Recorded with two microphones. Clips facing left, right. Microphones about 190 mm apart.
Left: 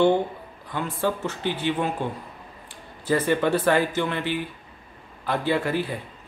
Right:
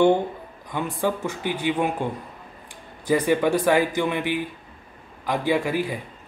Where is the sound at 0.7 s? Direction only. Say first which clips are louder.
Right 1 dB; 15° right (ahead or behind).